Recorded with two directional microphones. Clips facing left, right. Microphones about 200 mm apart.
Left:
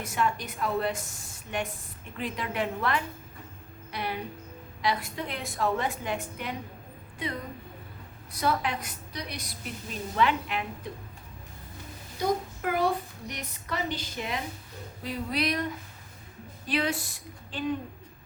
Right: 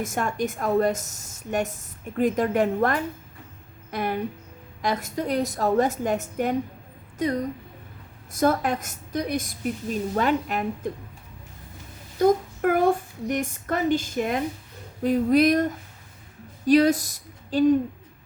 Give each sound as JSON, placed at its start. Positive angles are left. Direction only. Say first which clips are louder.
{"t": 0.0, "sound": "speech", "louder": "right 4 dB", "side_deg": -45}
{"t": 12.2, "sound": "speech", "louder": "right 9 dB", "side_deg": -50}